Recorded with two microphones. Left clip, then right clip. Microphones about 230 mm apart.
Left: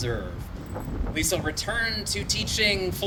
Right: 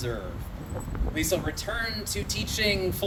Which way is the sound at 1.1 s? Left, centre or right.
Left.